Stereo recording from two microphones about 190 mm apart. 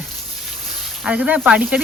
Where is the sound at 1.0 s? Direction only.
5° right (ahead or behind).